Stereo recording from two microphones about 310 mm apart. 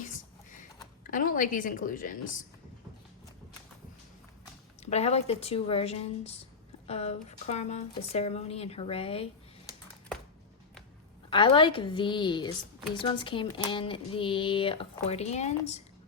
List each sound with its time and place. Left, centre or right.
0.0 s a sound: left
1.1 s a woman's voice: left
4.8 s a woman's voice: left
11.3 s speech: centre